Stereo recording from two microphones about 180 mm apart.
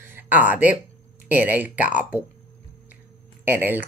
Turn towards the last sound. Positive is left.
turn(degrees=-10)  # may be behind; listen again after turning